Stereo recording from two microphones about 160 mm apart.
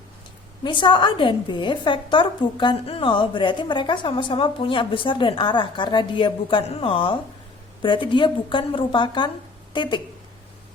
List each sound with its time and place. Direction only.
0.6 s a woman's voice: 30° left (ahead or behind)